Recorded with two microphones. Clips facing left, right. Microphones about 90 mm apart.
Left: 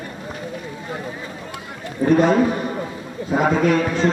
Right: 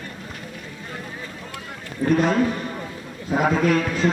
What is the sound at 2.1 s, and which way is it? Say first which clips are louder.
A man's voice: left 4 dB; centre (ahead or behind).